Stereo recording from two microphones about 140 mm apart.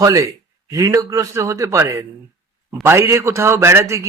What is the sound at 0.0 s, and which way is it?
A man's voice, 25° right (ahead or behind).